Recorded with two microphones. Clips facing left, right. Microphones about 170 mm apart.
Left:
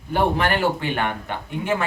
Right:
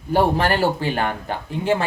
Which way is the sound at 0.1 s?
35° right (ahead or behind).